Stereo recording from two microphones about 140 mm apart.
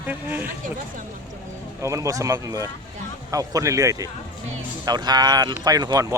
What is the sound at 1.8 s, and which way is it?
Speech, 20° right (ahead or behind).